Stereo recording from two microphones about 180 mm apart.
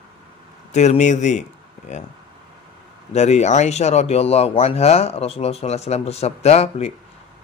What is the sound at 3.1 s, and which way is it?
Speech, 40° left (ahead or behind).